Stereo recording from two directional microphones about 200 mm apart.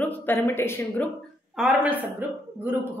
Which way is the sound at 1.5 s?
5° right (ahead or behind).